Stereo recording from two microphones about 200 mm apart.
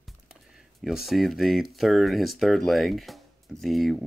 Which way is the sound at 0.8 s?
Centre (ahead or behind).